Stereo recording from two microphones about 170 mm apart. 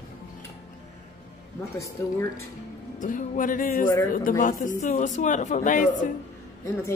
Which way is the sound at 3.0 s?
50° left (ahead or behind).